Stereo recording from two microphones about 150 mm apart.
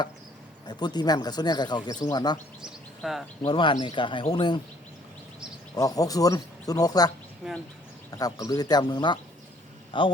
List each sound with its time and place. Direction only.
0.7 s speech: 30° left (ahead or behind)
2.6 s speech: centre (ahead or behind)
3.4 s speech: 35° left (ahead or behind)
5.7 s speech: 25° left (ahead or behind)
7.4 s speech: 5° right (ahead or behind)
8.2 s speech: 25° left (ahead or behind)